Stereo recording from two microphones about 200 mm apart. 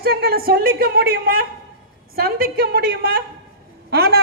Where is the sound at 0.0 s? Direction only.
50° right (ahead or behind).